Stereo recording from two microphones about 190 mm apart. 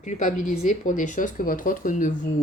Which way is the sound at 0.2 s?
40° left (ahead or behind).